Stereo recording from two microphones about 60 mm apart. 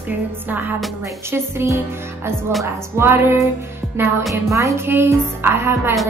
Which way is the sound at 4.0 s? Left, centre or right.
Right.